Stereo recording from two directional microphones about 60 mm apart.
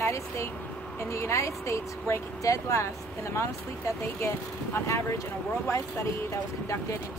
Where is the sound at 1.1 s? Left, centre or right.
Left.